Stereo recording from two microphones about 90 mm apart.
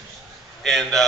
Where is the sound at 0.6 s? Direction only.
5° left (ahead or behind).